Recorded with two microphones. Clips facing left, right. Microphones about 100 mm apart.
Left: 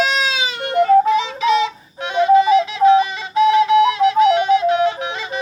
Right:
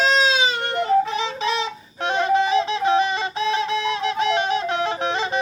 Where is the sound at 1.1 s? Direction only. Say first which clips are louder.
Left 7 dB; 35° right (ahead or behind).